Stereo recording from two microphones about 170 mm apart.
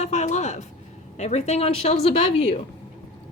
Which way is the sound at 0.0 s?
40° left (ahead or behind).